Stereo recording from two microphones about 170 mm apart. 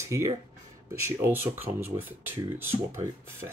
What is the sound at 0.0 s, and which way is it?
Speech, 20° right (ahead or behind).